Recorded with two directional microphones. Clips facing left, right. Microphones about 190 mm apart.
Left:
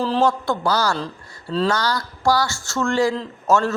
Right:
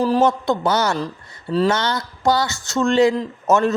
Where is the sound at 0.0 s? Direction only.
15° right (ahead or behind).